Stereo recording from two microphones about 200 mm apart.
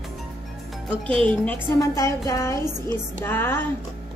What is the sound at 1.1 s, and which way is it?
Speech, 5° left (ahead or behind).